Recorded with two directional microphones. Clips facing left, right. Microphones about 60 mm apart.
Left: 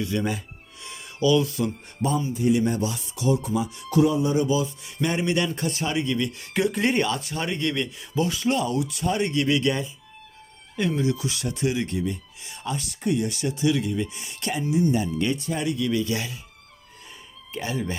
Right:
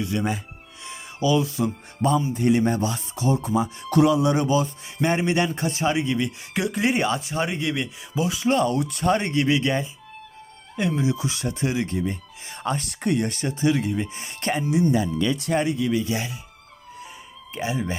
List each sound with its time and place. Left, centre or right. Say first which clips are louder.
0.0 s a man's voice: right 1 dB; centre
0.9 s a sound: left 1 dB; right
2.0 s speech: right 3 dB; right
3.8 s speech: right 2 dB; right
4.9 s a man's voice: right 2 dB; right; by 7.0 s centre
7.0 s speech: right 2 dB; centre
8.4 s speech: right 3 dB; right
9.2 s a man's voice: right 1 dB; right
11.0 s speech: right 1 dB; right
15.6 s a man's voice: right 1 dB; right
15.9 s speech: right 1 dB; centre
17.5 s speech: right 2 dB; centre